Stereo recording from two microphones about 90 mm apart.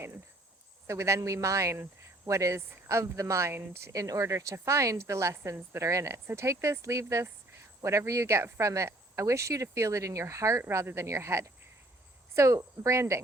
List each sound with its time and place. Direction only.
0.9 s speech: 30° right (ahead or behind)